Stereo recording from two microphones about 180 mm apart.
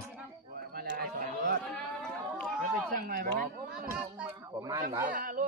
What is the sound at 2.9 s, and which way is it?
Speech, 50° right (ahead or behind).